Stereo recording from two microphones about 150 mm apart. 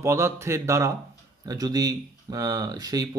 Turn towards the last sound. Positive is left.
turn(degrees=-25)  # may be behind; listen again after turning